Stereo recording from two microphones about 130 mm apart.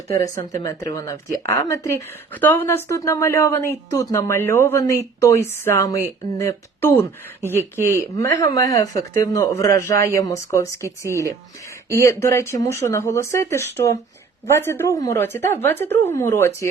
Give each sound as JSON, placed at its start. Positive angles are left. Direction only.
{"t": 0.3, "sound": "a woman's voice", "side_deg": 25}
{"t": 7.4, "sound": "speech", "side_deg": -15}
{"t": 7.8, "sound": "a woman's voice", "side_deg": 20}
{"t": 11.9, "sound": "a woman's voice", "side_deg": 20}